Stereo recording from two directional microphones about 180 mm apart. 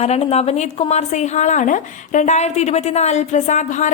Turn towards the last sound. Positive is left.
turn(degrees=40)  # may be behind; listen again after turning